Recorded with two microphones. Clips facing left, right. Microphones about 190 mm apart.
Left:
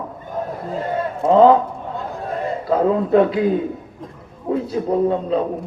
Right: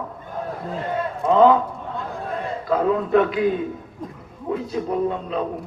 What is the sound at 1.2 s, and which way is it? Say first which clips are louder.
Speech: left 3 dB; 30° left (ahead or behind).